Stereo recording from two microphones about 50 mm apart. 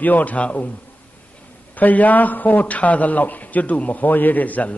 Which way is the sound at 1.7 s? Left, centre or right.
Left.